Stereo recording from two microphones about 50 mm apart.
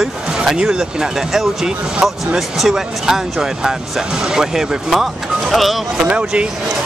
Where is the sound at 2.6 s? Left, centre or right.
Centre.